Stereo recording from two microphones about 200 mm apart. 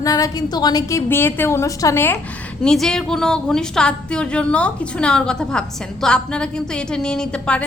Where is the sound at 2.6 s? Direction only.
5° left (ahead or behind).